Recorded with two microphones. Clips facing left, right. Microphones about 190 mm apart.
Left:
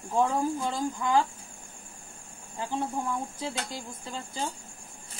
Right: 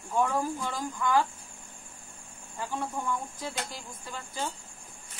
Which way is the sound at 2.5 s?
25° left (ahead or behind).